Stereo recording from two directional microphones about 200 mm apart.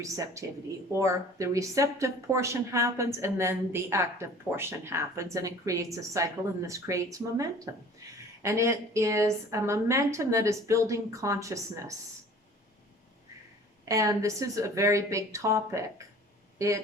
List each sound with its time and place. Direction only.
0.0 s speech: 15° right (ahead or behind)
13.8 s speech: 15° right (ahead or behind)